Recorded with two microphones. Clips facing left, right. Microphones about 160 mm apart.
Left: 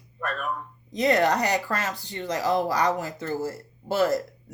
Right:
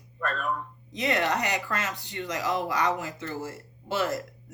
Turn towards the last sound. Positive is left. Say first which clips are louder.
# left 5 dB
turn(degrees=35)  # may be behind; listen again after turning